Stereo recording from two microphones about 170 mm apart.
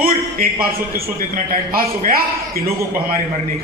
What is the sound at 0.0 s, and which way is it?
A man's voice, 60° right (ahead or behind).